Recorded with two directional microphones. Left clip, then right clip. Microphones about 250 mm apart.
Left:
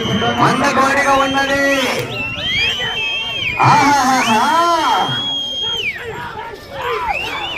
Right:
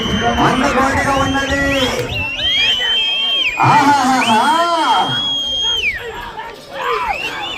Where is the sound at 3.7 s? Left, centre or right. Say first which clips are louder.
Even; left.